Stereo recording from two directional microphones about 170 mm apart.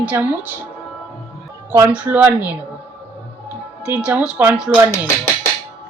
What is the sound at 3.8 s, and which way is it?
Speech, 10° right (ahead or behind).